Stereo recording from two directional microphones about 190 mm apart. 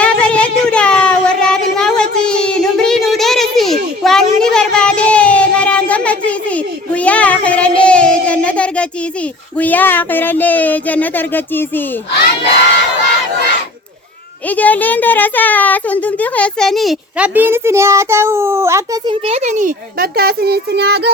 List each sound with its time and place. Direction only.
0.0 s child singing: 5° left (ahead or behind)
9.6 s a sound: 10° left (ahead or behind)
14.5 s a woman's voice: 10° left (ahead or behind); by 18.8 s 15° right (ahead or behind)
19.0 s a child's voice: 30° right (ahead or behind); by 21.1 s 60° right (ahead or behind)